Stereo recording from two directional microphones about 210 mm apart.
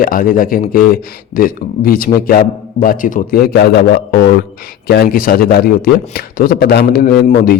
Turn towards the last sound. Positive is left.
turn(degrees=45)  # may be behind; listen again after turning